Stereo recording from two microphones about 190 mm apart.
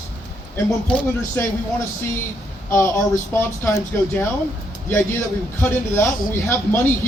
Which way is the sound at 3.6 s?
15° left (ahead or behind).